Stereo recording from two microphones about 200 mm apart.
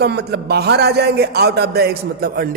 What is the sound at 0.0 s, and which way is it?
A man's voice, 55° right (ahead or behind).